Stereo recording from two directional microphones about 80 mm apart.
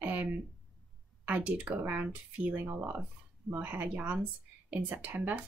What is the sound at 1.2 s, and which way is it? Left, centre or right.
Speech, centre.